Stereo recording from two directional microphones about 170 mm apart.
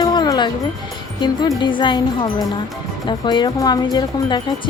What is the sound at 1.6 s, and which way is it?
A woman's voice, 30° left (ahead or behind).